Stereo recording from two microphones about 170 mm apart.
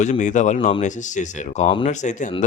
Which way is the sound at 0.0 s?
45° left (ahead or behind).